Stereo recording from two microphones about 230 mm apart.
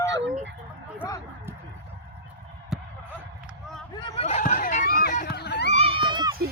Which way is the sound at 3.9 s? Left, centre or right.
Left.